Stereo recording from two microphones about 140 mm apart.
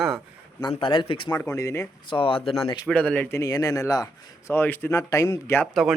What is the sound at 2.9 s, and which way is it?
Speech, 10° left (ahead or behind).